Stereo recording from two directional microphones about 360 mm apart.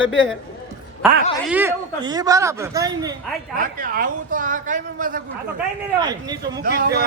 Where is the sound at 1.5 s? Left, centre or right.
Centre.